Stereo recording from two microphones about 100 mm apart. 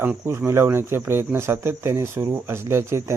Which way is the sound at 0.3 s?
25° right (ahead or behind).